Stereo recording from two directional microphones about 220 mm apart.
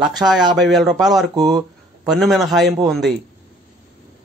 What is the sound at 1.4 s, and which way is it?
Speech, 15° right (ahead or behind).